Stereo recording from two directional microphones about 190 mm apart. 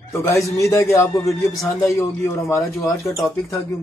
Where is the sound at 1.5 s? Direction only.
Centre (ahead or behind).